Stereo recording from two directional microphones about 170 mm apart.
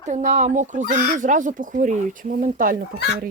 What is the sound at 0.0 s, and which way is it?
Speech, 45° right (ahead or behind).